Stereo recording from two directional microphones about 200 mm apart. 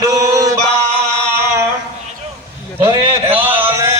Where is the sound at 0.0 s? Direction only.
15° right (ahead or behind).